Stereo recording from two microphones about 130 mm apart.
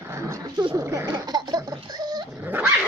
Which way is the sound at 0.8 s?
25° right (ahead or behind).